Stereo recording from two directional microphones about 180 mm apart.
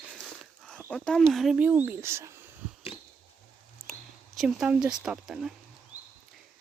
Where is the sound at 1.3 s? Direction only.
5° right (ahead or behind).